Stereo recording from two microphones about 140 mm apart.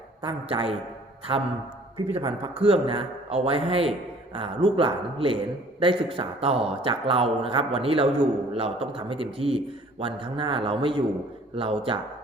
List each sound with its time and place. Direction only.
0.2 s a man's voice: 40° right (ahead or behind)
2.0 s a man's voice: 45° right (ahead or behind)